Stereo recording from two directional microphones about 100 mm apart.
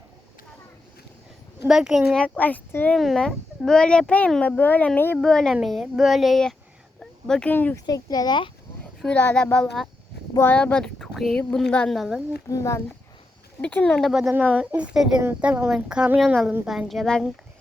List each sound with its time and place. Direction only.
1.6 s speech: 5° right (ahead or behind)
2.2 s a child's voice: 15° left (ahead or behind)
3.0 s a child's voice: 5° left (ahead or behind)
5.1 s speech: 5° left (ahead or behind)
7.0 s a sound: 5° left (ahead or behind)
7.5 s speech: 20° left (ahead or behind)
7.9 s speech: 40° left (ahead or behind)
9.0 s a child's voice: 10° left (ahead or behind)
11.9 s speech: centre (ahead or behind)
12.5 s speech: 35° left (ahead or behind)
13.6 s a child's voice: 15° left (ahead or behind)
14.3 s speech: 15° right (ahead or behind); by 17.2 s 5° left (ahead or behind)